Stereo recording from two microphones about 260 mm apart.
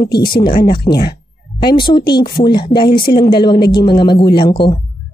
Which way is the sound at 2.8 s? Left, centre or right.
Left.